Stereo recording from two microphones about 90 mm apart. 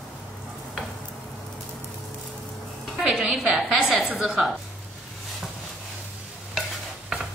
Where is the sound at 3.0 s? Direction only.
Centre (ahead or behind).